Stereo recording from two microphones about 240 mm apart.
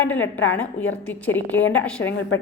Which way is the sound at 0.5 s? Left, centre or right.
Centre.